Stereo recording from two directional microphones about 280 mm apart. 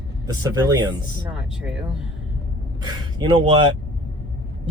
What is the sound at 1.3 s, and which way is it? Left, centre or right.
Speech, centre.